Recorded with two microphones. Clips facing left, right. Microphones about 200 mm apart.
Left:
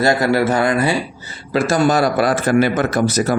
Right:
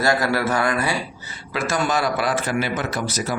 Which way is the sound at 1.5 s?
35° left (ahead or behind).